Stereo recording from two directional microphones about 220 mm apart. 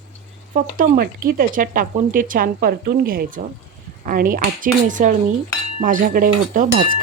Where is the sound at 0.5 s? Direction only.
40° right (ahead or behind).